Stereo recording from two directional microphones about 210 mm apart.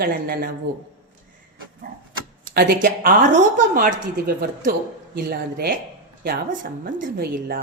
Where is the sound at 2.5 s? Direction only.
40° right (ahead or behind).